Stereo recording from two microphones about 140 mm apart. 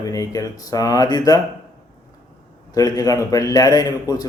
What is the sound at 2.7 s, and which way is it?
Speech, 25° left (ahead or behind).